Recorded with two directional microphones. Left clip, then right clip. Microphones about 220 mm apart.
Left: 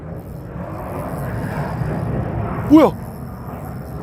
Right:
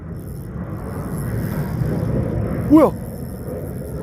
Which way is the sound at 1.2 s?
55° left (ahead or behind).